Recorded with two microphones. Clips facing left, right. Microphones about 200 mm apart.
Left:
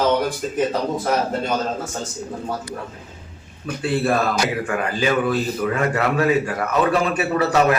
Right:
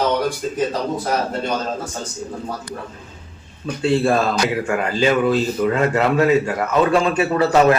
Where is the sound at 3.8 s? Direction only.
25° right (ahead or behind).